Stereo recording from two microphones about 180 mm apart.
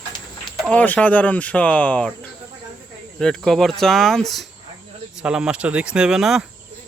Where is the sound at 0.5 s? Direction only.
5° left (ahead or behind).